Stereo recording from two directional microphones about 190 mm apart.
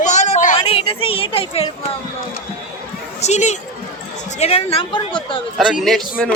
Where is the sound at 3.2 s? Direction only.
35° left (ahead or behind).